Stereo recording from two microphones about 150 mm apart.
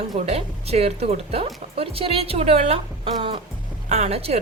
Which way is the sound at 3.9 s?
45° right (ahead or behind).